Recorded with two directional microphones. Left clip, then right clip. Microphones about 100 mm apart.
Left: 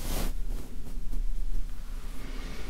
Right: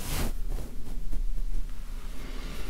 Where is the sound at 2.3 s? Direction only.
5° right (ahead or behind).